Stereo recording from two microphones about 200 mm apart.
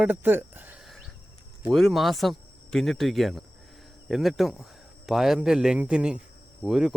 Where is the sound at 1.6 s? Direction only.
Centre (ahead or behind).